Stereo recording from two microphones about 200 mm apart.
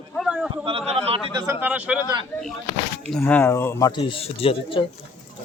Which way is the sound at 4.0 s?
30° left (ahead or behind).